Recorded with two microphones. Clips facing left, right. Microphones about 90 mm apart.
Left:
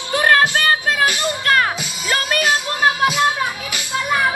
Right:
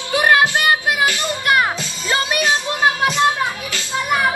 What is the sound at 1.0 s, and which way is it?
Music, 20° left (ahead or behind).